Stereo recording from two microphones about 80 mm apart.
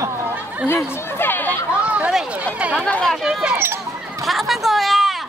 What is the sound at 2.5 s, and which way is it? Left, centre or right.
Chatter, centre.